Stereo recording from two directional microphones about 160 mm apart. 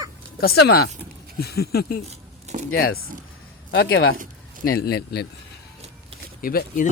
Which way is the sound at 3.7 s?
90° left.